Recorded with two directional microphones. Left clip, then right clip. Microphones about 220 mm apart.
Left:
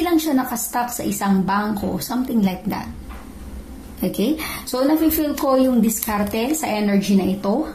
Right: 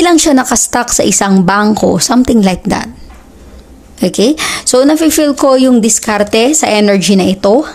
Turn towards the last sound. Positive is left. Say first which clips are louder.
# right 12 dB
turn(degrees=-50)  # may be behind; listen again after turning